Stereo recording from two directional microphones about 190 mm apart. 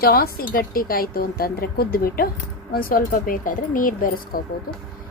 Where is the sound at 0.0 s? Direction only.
50° left (ahead or behind).